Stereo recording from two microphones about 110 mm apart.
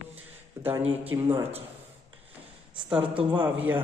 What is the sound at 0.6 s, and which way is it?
Speech, 20° right (ahead or behind).